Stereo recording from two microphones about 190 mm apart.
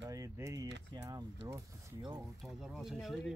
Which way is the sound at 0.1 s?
15° right (ahead or behind).